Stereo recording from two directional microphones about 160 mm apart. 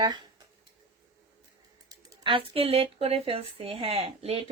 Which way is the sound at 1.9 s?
25° right (ahead or behind).